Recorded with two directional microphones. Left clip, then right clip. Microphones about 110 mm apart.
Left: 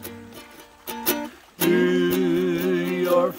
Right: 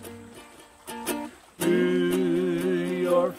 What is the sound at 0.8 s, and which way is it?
Music, 40° left (ahead or behind).